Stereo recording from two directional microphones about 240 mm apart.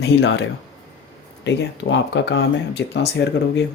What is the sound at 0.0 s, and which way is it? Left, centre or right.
Speech, left.